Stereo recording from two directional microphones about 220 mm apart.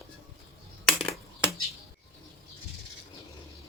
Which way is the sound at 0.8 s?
Centre (ahead or behind).